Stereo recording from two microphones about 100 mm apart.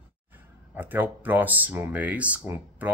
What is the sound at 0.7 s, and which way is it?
Speech, 20° right (ahead or behind).